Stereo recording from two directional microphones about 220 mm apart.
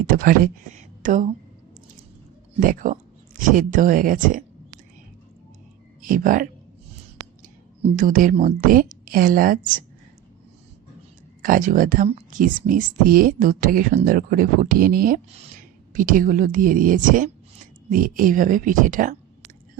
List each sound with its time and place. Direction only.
0.1 s speech: 40° right (ahead or behind)
2.6 s speech: 40° right (ahead or behind)
6.0 s speech: 40° right (ahead or behind)
7.9 s speech: 35° right (ahead or behind)
11.4 s speech: 40° right (ahead or behind)